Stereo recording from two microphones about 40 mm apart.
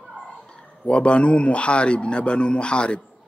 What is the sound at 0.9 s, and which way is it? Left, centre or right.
A man's voice, left.